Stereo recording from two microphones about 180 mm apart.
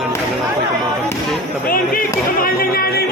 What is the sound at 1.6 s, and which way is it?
Speech, 55° left (ahead or behind).